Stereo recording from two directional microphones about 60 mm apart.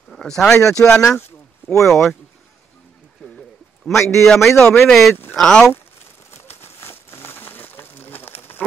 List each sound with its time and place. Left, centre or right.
0.1 s speech: centre
3.3 s a sound: centre
4.0 s a man's voice: left
4.3 s speech: centre
6.3 s crumpling: left